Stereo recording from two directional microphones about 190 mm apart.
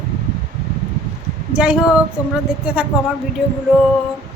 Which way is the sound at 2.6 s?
5° right (ahead or behind).